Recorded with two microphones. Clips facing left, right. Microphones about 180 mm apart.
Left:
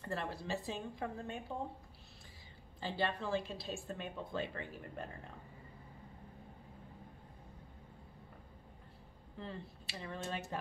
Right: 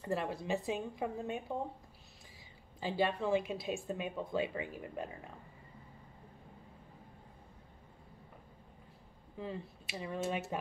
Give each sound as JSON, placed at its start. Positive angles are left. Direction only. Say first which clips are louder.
{"t": 0.0, "sound": "a woman's voice", "louder": "right 4 dB", "side_deg": -15}
{"t": 2.8, "sound": "a woman's voice", "louder": "right 4 dB", "side_deg": -10}
{"t": 9.4, "sound": "a woman's voice", "louder": "right 4 dB", "side_deg": -10}